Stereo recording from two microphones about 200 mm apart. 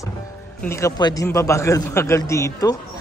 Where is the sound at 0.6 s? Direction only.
15° left (ahead or behind).